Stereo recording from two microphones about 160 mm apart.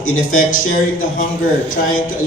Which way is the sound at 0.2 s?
60° left (ahead or behind).